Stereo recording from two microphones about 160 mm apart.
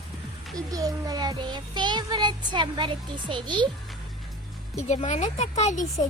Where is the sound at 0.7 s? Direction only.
20° right (ahead or behind).